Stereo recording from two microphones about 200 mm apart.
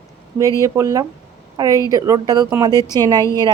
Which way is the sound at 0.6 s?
15° right (ahead or behind).